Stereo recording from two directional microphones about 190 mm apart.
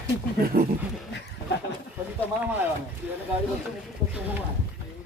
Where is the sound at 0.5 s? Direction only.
50° right (ahead or behind).